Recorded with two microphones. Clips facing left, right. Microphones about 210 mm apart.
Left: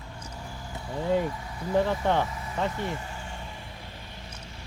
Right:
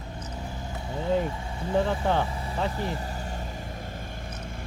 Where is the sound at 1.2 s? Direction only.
25° right (ahead or behind).